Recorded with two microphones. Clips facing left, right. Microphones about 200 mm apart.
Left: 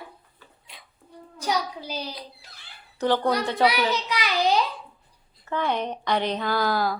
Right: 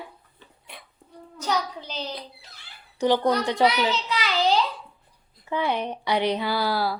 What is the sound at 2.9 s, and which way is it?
Speech, 15° right (ahead or behind).